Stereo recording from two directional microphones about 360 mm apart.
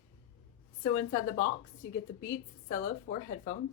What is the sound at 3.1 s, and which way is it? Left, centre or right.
Speech, left.